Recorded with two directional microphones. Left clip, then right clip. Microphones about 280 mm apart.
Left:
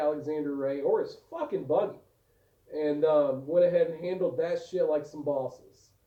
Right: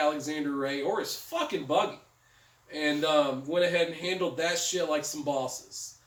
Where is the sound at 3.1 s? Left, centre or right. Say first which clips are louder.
Even; centre.